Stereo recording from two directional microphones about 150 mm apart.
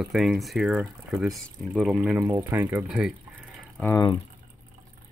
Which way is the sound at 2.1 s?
25° right (ahead or behind).